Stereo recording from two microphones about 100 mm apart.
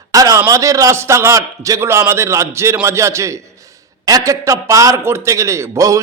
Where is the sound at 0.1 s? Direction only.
35° right (ahead or behind).